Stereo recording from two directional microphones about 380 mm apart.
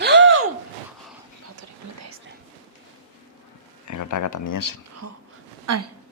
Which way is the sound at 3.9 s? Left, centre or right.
Left.